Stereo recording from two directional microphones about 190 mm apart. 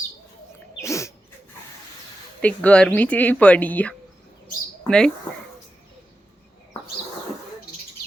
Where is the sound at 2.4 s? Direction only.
5° left (ahead or behind).